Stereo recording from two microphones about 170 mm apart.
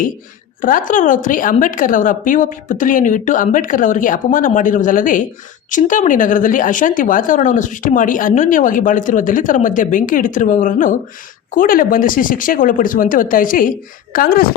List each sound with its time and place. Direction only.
0.6 s speech: 50° left (ahead or behind)